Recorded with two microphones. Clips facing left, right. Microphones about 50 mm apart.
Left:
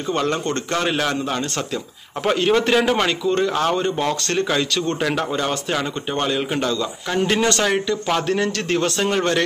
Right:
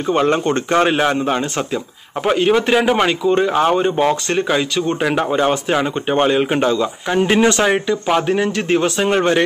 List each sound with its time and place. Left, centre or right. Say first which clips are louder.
0.1 s speech: right 6 dB; right
2.2 s a man's voice: right 3 dB; centre